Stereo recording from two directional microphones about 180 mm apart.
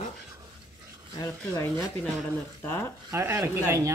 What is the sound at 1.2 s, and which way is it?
Speech, 15° left (ahead or behind).